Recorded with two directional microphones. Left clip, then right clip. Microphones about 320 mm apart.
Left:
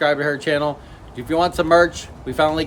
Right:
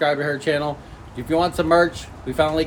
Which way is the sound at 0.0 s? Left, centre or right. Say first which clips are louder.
Left 2 dB; centre.